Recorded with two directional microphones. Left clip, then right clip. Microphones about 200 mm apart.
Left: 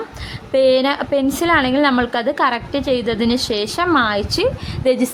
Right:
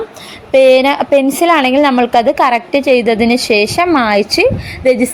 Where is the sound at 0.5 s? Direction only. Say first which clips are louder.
Right 7 dB; 15° right (ahead or behind).